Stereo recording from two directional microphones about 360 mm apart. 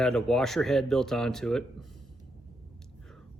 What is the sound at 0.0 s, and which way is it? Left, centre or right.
A man's voice, centre.